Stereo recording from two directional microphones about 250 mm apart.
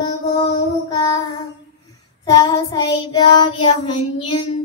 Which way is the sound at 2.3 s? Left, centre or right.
Centre.